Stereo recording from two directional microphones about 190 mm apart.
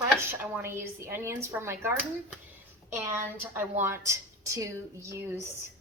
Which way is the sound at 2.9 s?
10° right (ahead or behind).